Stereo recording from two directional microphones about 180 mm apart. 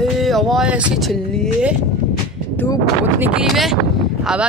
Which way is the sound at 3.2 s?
5° right (ahead or behind).